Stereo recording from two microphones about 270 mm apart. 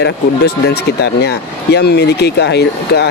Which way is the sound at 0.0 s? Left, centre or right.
Left.